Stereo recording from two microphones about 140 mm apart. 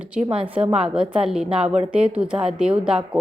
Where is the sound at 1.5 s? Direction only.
45° right (ahead or behind).